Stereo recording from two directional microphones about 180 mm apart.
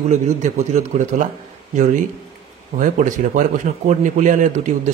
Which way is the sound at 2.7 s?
45° right (ahead or behind).